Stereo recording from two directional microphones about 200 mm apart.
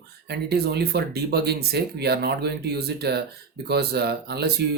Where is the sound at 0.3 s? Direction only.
55° right (ahead or behind).